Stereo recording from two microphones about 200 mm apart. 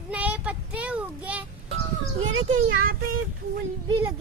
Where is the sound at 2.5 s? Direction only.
45° right (ahead or behind).